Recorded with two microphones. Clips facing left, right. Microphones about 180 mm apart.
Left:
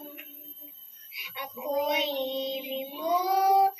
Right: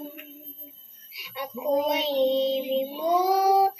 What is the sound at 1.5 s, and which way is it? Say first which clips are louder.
Child singing: right 4 dB; 35° right (ahead or behind).